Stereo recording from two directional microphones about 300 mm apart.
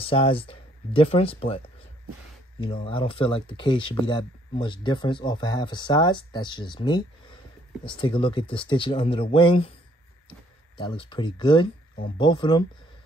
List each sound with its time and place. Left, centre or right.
0.0 s speech: centre
2.6 s speech: centre
10.8 s speech: centre